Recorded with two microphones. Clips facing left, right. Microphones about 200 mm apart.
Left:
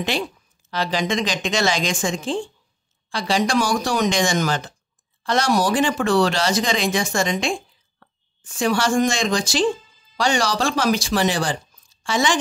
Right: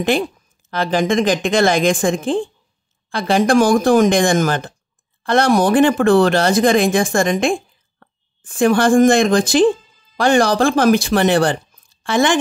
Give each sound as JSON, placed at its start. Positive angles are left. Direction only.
{"t": 0.0, "sound": "speech", "side_deg": -50}